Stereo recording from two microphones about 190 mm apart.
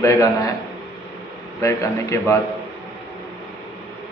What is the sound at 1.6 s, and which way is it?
Speech, 15° left (ahead or behind).